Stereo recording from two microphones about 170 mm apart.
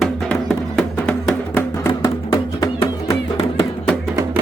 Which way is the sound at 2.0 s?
20° left (ahead or behind).